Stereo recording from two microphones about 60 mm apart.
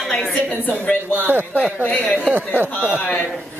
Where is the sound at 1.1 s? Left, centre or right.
Right.